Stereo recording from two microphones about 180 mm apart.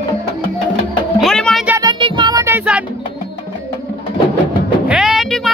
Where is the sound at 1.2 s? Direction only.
5° left (ahead or behind).